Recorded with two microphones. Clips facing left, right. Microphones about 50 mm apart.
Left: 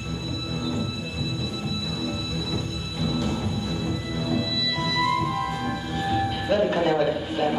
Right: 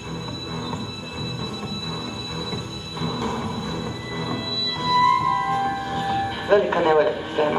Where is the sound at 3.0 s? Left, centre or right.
Right.